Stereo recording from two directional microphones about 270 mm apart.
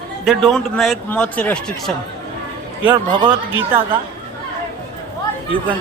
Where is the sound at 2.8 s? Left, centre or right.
Centre.